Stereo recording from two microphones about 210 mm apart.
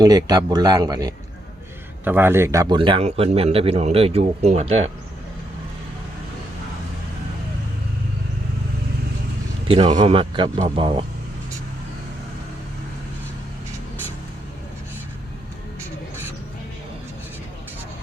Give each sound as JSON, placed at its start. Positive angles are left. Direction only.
{"t": 0.0, "sound": "a man's voice", "side_deg": -20}
{"t": 9.6, "sound": "a man's voice", "side_deg": -25}